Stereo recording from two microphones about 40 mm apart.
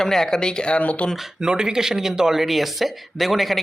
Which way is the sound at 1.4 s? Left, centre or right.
Centre.